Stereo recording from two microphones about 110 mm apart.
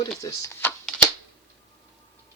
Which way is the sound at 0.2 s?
30° left (ahead or behind).